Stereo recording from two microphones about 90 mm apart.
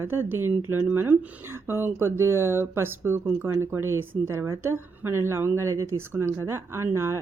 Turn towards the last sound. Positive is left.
turn(degrees=-30)  # may be behind; listen again after turning